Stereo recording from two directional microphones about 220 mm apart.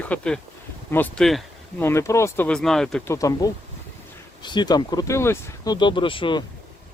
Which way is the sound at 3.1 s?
15° left (ahead or behind).